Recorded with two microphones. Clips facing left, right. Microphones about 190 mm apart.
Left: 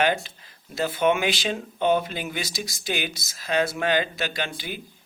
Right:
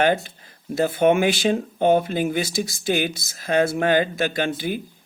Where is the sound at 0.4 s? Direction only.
50° right (ahead or behind).